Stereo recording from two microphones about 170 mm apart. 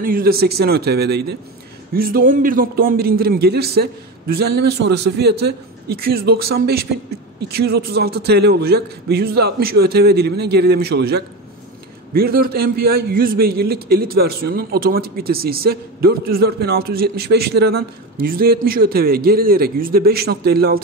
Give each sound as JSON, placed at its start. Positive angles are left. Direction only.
{"t": 0.0, "sound": "a man's voice", "side_deg": -60}
{"t": 2.0, "sound": "a man's voice", "side_deg": -55}